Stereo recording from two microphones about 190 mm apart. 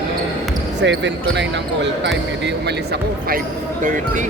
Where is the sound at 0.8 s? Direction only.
70° right (ahead or behind).